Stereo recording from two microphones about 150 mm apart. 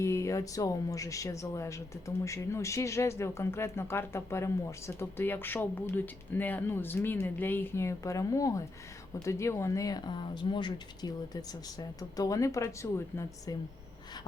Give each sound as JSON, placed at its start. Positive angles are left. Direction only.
{"t": 0.0, "sound": "speech", "side_deg": 20}